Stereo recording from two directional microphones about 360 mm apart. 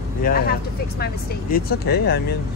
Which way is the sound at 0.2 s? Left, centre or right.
Left.